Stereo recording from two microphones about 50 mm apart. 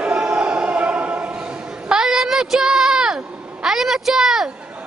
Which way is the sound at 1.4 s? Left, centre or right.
Centre.